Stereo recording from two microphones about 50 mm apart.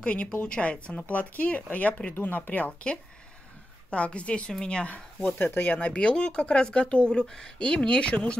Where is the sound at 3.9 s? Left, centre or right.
Left.